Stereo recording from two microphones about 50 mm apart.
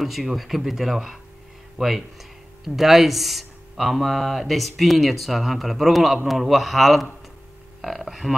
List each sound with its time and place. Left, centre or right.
0.0 s speech: centre